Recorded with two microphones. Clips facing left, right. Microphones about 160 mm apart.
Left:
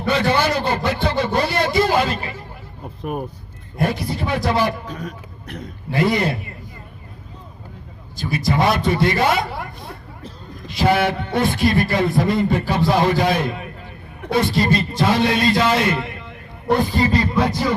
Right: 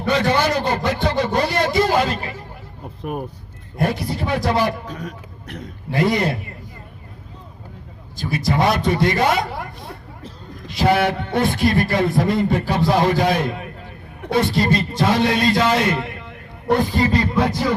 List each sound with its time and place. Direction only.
0.2 s a man's voice: 40° right (ahead or behind)
1.2 s a sound: 45° right (ahead or behind)
3.8 s a man's voice: 50° right (ahead or behind)
4.9 s a man's voice: 40° left (ahead or behind)
5.9 s a man's voice: 45° right (ahead or behind)
8.4 s a man's voice: 45° right (ahead or behind)
10.8 s a man's voice: 50° right (ahead or behind)